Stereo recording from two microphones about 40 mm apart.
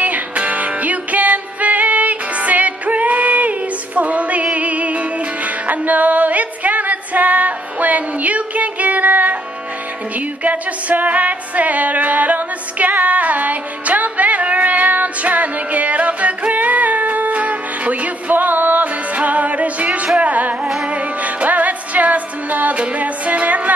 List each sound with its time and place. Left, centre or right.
0.0 s music: right
10.4 s music: right